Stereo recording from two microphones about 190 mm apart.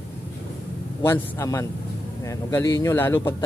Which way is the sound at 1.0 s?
15° left (ahead or behind).